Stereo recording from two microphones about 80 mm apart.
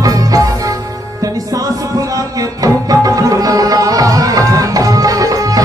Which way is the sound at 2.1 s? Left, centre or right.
Right.